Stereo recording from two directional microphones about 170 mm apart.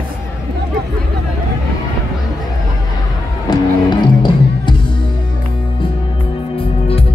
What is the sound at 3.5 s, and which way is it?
Music, 25° left (ahead or behind).